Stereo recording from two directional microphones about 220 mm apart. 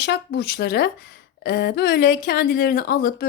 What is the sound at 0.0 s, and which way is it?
Speech, 50° left (ahead or behind).